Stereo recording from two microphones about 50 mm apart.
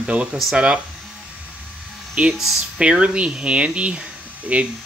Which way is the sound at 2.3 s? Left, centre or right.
Centre.